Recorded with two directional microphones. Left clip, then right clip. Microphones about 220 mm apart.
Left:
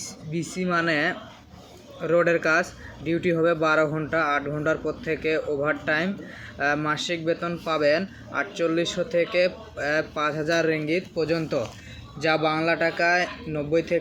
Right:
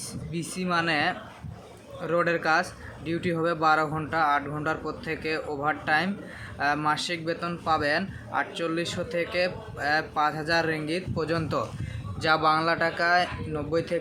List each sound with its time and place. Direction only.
0.3 s speech: centre (ahead or behind)